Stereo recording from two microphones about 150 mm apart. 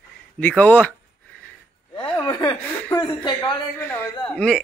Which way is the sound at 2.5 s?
10° left (ahead or behind).